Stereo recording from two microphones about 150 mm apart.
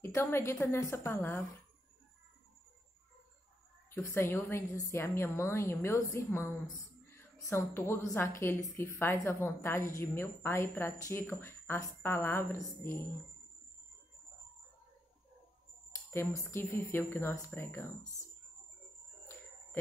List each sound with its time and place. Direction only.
0.0 s a woman's voice: 15° left (ahead or behind)
3.9 s a woman's voice: 15° left (ahead or behind)
16.1 s a woman's voice: 15° left (ahead or behind)